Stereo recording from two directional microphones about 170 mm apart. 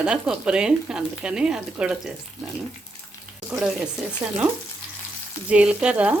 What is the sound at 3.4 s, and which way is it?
Speech, 5° right (ahead or behind).